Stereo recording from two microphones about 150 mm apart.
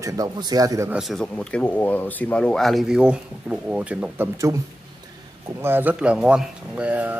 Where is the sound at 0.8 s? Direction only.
5° right (ahead or behind).